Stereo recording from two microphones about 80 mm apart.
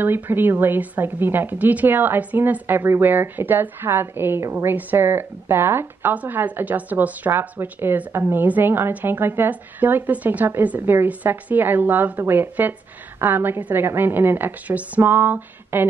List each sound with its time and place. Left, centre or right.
0.0 s a woman's voice: right